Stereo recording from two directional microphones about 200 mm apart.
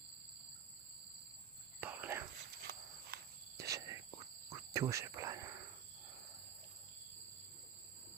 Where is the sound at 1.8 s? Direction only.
10° right (ahead or behind).